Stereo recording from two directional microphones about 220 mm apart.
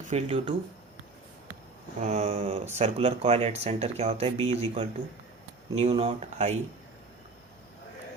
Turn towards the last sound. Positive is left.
turn(degrees=-30)  # may be behind; listen again after turning